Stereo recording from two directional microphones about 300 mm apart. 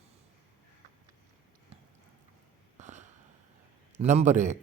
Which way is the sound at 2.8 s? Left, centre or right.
Right.